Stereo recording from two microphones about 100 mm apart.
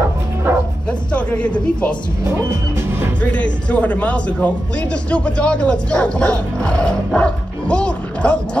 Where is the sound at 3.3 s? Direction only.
10° left (ahead or behind).